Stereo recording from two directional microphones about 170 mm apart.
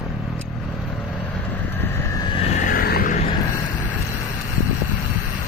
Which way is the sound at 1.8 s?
15° left (ahead or behind).